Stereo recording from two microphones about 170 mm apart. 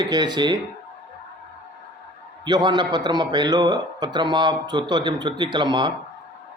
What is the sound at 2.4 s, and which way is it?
A man's voice, 25° right (ahead or behind).